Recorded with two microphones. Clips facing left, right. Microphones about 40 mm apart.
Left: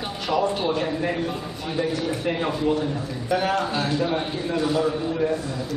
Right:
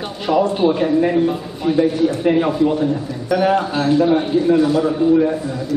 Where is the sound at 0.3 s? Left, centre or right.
Centre.